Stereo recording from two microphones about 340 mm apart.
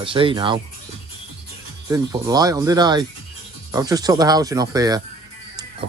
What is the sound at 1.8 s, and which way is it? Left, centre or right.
Speech, centre.